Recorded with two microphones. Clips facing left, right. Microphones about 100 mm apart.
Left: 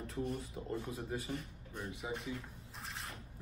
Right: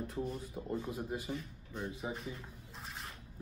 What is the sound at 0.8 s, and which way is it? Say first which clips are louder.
Speech: right 2 dB; 30° right (ahead or behind).